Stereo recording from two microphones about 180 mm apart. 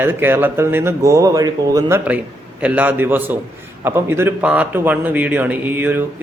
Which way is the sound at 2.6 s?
10° right (ahead or behind).